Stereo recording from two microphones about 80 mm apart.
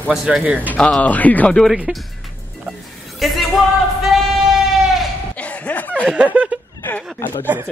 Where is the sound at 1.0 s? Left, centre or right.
Centre.